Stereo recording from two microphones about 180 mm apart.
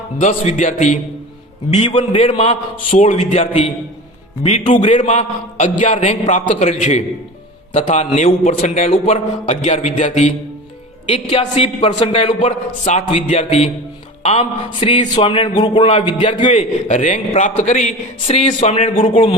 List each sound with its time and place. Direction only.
0.2 s a man's voice: 40° left (ahead or behind)
3.1 s a man's voice: 35° left (ahead or behind)
4.9 s a man's voice: 40° left (ahead or behind); by 16.5 s 25° left (ahead or behind)
16.5 s a man's voice: 40° left (ahead or behind)